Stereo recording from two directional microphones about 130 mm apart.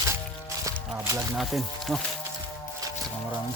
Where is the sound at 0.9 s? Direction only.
20° right (ahead or behind).